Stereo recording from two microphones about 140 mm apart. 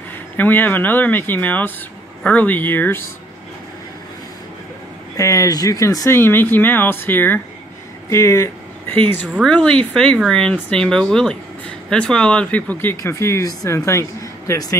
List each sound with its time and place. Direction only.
0.4 s speech: 10° left (ahead or behind)
5.1 s speech: 25° left (ahead or behind)
12.9 s speech: 25° left (ahead or behind)